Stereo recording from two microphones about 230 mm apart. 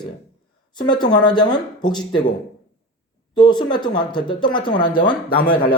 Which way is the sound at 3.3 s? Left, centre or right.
Centre.